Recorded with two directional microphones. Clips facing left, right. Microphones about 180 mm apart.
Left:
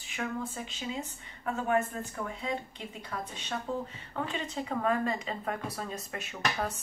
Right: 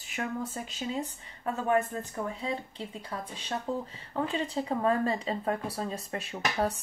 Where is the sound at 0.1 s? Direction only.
40° right (ahead or behind).